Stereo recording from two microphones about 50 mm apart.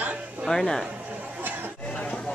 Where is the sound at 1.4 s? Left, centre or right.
Right.